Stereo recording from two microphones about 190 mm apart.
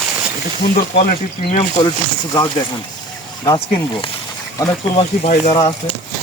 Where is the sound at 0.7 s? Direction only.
40° left (ahead or behind).